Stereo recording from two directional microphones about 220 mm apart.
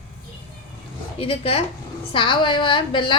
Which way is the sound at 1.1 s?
25° left (ahead or behind).